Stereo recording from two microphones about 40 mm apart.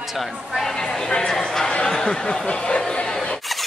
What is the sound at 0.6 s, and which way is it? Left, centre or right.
Speech, centre.